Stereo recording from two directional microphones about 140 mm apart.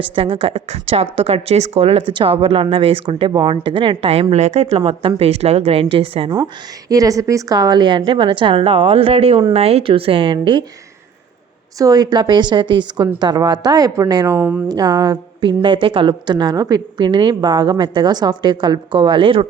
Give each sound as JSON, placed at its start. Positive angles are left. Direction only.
{"t": 0.0, "sound": "a woman's voice", "side_deg": -40}
{"t": 6.3, "sound": "a woman's voice", "side_deg": -25}
{"t": 11.8, "sound": "a woman's voice", "side_deg": -25}